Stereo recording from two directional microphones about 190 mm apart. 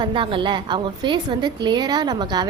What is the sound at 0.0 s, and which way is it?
A woman's voice, 25° right (ahead or behind).